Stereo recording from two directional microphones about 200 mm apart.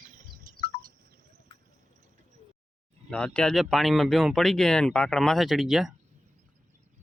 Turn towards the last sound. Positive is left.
turn(degrees=0)  # may be behind; listen again after turning